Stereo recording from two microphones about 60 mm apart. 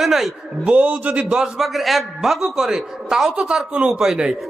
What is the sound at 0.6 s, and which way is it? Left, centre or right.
Speech, right.